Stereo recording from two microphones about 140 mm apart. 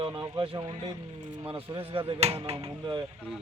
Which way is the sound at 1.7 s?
40° right (ahead or behind).